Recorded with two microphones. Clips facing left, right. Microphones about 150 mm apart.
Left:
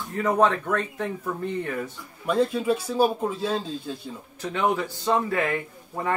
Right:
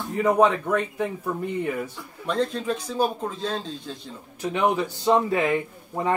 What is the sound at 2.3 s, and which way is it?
A man's voice, 10° left (ahead or behind).